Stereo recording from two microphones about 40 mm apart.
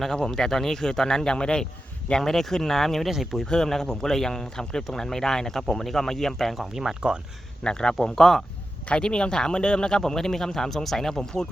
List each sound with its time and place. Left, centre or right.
0.2 s speech: centre
2.2 s speech: centre
7.0 s speech: right
7.6 s speech: centre